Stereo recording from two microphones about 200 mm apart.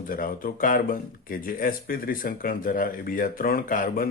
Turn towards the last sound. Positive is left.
turn(degrees=45)  # may be behind; listen again after turning